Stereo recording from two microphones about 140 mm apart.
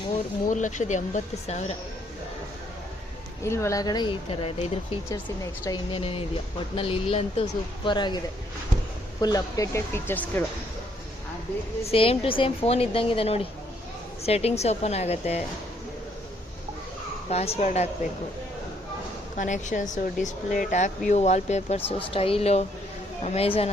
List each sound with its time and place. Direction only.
0.4 s speech: 60° left (ahead or behind)
3.4 s speech: 20° left (ahead or behind)
4.3 s a woman's voice: 45° left (ahead or behind)
5.9 s a woman's voice: 40° left (ahead or behind)
7.9 s speech: 30° left (ahead or behind)
9.2 s speech: 25° left (ahead or behind)
11.8 s a woman's voice: 45° left (ahead or behind)
17.2 s a woman's voice: 50° left (ahead or behind)
19.4 s a woman's voice: 65° left (ahead or behind)
21.9 s a woman's voice: 40° left (ahead or behind)